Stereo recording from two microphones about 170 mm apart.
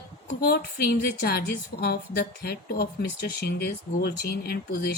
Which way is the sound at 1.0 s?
65° left (ahead or behind).